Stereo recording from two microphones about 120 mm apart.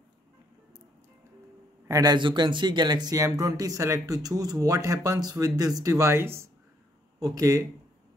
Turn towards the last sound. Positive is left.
turn(degrees=-25)  # may be behind; listen again after turning